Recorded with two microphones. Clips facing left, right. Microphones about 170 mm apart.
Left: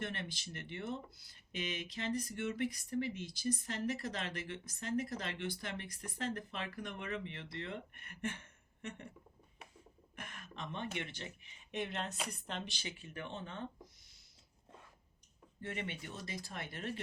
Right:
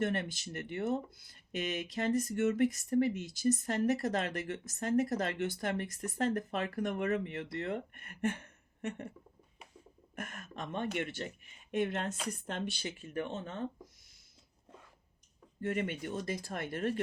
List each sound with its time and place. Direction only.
0.0 s speech: 50° right (ahead or behind)
10.2 s speech: 45° right (ahead or behind)
15.6 s speech: 45° right (ahead or behind)